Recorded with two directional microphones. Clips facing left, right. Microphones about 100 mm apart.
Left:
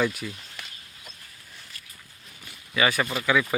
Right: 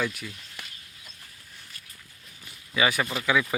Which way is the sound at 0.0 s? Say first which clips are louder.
Left 4 dB; centre (ahead or behind).